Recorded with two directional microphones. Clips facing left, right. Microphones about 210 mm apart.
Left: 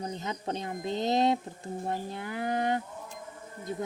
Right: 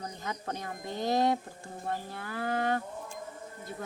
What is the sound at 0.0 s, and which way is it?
Speech, 20° left (ahead or behind).